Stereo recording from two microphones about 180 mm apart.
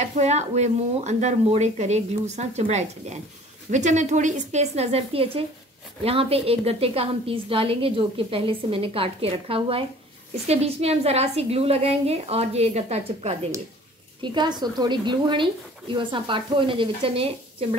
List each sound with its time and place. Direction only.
0.0 s a woman's voice: 40° right (ahead or behind)
14.2 s a woman's voice: 25° right (ahead or behind)